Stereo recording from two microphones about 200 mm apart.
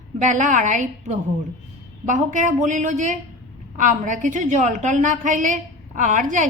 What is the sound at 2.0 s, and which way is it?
A woman's voice, 40° right (ahead or behind).